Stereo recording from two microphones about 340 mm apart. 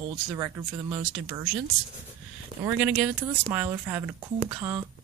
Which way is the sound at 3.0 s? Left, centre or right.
Centre.